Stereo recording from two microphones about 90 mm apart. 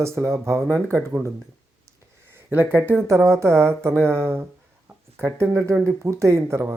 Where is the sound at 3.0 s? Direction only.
35° right (ahead or behind).